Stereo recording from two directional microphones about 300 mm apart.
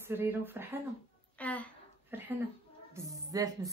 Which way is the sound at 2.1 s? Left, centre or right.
Centre.